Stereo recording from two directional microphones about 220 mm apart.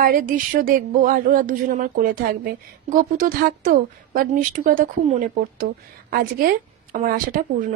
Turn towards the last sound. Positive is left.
turn(degrees=-40)  # may be behind; listen again after turning